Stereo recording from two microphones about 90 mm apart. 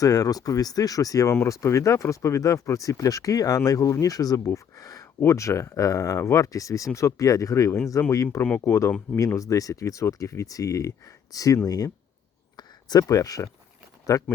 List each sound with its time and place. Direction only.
0.0 s speech: 45° left (ahead or behind)
8.4 s speech: 20° left (ahead or behind)
9.1 s speech: 35° left (ahead or behind)